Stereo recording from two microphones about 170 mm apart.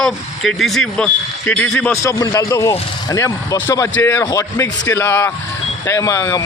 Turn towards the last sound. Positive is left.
turn(degrees=20)  # may be behind; listen again after turning